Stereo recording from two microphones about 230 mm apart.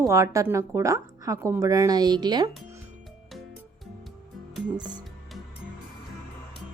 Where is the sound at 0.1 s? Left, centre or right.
Centre.